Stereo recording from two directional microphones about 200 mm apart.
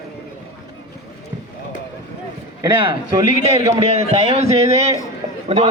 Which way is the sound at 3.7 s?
30° right (ahead or behind).